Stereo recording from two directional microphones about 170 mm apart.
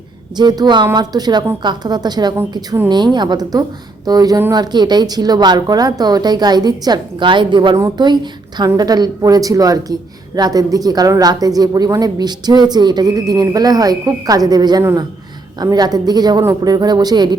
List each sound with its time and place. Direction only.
0.3 s a woman's voice: 25° right (ahead or behind)